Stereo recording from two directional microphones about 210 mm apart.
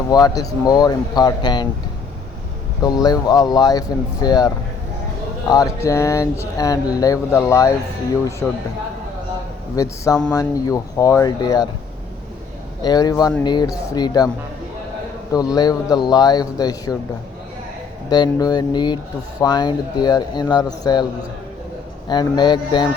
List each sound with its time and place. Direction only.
0.1 s speech: 15° left (ahead or behind)
2.8 s speech: 20° left (ahead or behind)
9.7 s speech: 15° left (ahead or behind)
12.8 s speech: 20° left (ahead or behind)
15.5 s speech: 20° left (ahead or behind)
18.1 s speech: 20° left (ahead or behind)
22.1 s speech: 20° left (ahead or behind)